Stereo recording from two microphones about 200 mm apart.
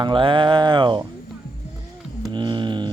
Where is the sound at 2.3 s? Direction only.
25° right (ahead or behind).